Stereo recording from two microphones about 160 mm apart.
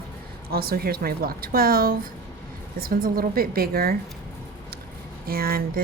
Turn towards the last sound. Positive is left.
turn(degrees=-65)  # may be behind; listen again after turning